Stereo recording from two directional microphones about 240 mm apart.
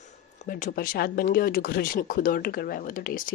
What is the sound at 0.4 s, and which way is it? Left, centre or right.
Speech, left.